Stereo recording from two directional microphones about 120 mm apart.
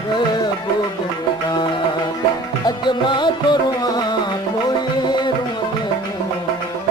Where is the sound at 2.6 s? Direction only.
40° left (ahead or behind).